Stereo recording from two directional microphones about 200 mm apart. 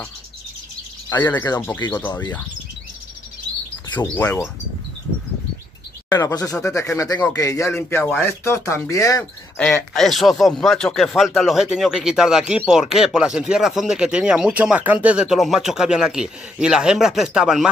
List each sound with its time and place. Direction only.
1.3 s speech: 15° left (ahead or behind)
3.9 s speech: 10° left (ahead or behind)
6.0 s speech: 15° left (ahead or behind); by 17.6 s 5° right (ahead or behind)